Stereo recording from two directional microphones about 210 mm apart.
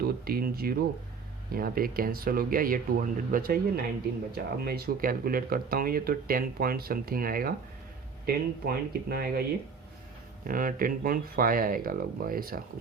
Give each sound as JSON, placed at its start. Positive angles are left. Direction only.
{"t": 0.0, "sound": "speech", "side_deg": -45}
{"t": 10.4, "sound": "speech", "side_deg": -40}